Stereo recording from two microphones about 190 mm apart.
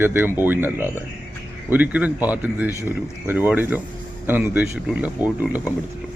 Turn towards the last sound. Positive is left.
turn(degrees=-5)  # may be behind; listen again after turning